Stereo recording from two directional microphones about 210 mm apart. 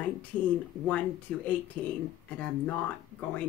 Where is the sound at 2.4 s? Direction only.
10° left (ahead or behind).